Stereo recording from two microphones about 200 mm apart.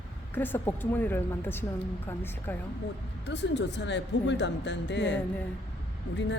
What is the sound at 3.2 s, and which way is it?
Speech, 60° left (ahead or behind).